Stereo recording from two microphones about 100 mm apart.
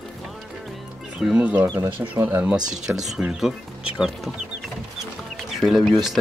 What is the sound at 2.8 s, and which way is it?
Speech, 5° right (ahead or behind).